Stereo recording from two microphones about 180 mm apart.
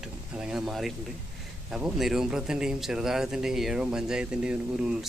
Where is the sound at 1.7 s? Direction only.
5° right (ahead or behind).